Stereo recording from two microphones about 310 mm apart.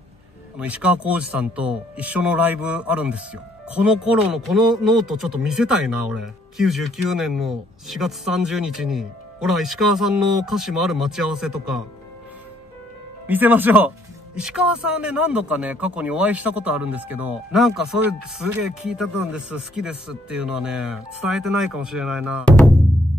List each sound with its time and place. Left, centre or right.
0.6 s speech: centre
13.3 s speech: centre